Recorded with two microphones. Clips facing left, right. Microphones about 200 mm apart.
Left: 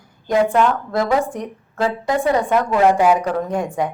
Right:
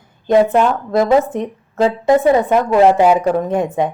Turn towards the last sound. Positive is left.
turn(degrees=-20)  # may be behind; listen again after turning